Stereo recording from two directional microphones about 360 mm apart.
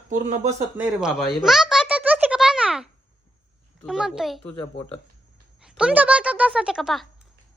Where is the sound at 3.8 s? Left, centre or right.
Centre.